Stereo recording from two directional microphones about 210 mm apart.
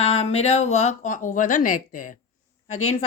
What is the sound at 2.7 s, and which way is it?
Speech, 85° left.